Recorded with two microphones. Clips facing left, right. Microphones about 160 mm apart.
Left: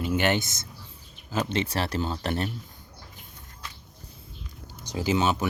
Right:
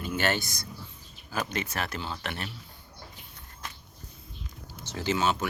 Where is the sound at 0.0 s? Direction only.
20° left (ahead or behind); by 2.5 s 35° left (ahead or behind).